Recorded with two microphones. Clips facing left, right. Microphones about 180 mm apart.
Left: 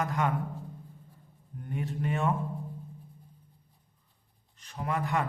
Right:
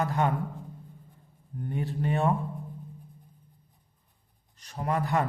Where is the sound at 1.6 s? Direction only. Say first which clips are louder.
Right 3 dB; 35° right (ahead or behind).